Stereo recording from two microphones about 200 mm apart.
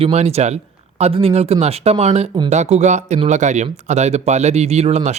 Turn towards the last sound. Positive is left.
turn(degrees=-35)  # may be behind; listen again after turning